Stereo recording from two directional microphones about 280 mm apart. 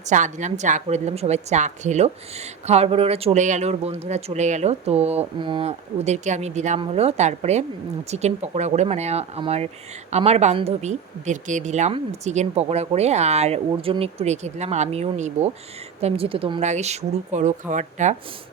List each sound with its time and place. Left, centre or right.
0.1 s speech: right